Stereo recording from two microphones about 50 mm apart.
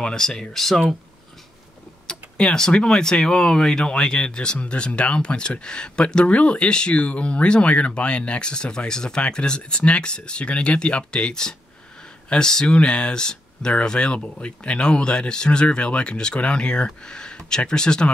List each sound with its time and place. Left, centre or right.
0.0 s speech: centre
2.0 s speech: centre